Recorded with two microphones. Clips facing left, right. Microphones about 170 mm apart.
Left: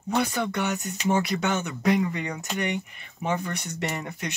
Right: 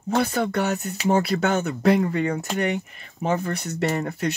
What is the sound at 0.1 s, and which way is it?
Speech, 50° right (ahead or behind).